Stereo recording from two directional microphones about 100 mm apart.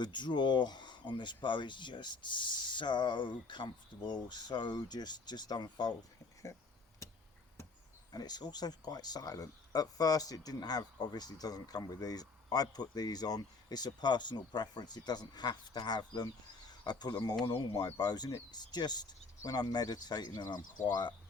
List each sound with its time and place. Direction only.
0.0 s speech: 50° left (ahead or behind)
8.1 s speech: 40° left (ahead or behind)